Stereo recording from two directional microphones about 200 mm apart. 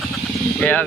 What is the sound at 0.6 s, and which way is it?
Speech, 5° left (ahead or behind).